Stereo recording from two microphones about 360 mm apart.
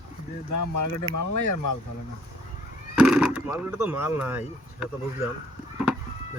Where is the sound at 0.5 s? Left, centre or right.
Left.